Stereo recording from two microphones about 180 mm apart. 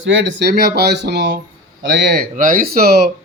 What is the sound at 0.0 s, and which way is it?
Speech, 75° right (ahead or behind).